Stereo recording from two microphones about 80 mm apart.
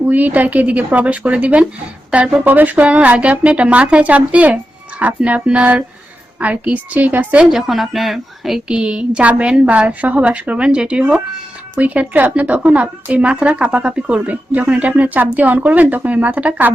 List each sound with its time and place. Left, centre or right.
0.1 s a woman's voice: right
7.5 s a woman's voice: centre; by 16.7 s right